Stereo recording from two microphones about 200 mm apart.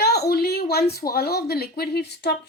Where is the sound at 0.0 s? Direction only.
55° left (ahead or behind).